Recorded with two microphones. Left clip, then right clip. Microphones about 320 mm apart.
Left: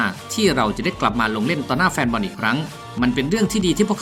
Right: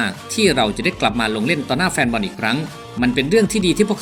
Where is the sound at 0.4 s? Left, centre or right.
Centre.